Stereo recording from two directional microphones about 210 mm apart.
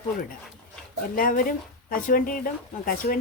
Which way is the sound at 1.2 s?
40° left (ahead or behind).